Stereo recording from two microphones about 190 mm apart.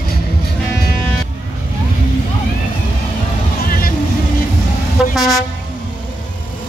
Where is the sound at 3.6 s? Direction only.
50° left (ahead or behind).